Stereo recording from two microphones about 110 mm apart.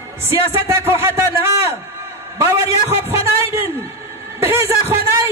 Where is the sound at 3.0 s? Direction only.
25° right (ahead or behind).